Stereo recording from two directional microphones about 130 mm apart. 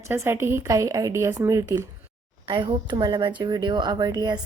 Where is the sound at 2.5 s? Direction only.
40° right (ahead or behind).